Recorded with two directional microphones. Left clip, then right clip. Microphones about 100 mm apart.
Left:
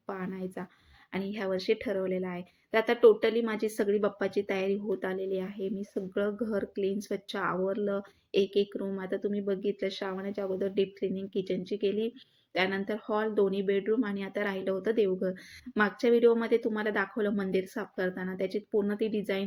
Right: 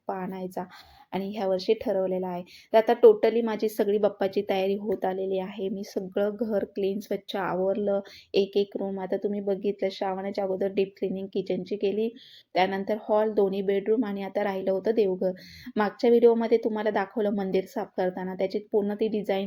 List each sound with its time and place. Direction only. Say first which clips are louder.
0.1 s a woman's voice: right 5 dB; 40° right (ahead or behind)